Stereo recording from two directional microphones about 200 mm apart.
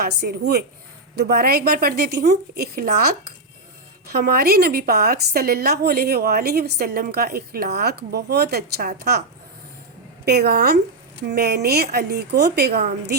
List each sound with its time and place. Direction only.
0.2 s a woman's voice: 55° right (ahead or behind)
10.2 s a woman's voice: 55° right (ahead or behind)